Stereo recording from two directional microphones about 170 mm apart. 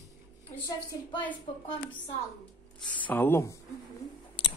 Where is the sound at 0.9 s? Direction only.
25° left (ahead or behind).